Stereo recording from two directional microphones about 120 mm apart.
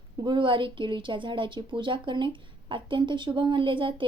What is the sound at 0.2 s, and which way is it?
Speech, 45° right (ahead or behind).